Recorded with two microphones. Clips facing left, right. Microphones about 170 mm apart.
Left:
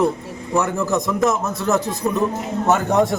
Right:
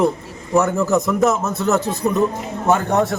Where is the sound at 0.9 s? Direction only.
5° right (ahead or behind).